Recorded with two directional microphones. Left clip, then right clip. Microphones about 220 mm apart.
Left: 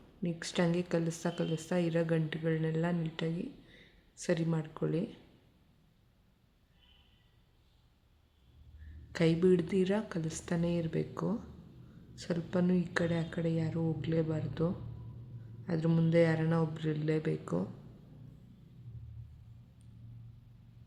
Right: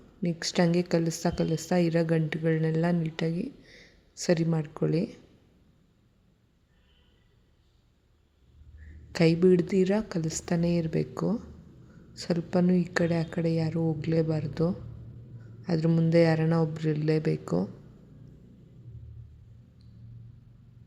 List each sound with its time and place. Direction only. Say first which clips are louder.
0.2 s a woman's voice: right 6 dB; 20° right (ahead or behind)
9.1 s a woman's voice: right 6 dB; 20° right (ahead or behind)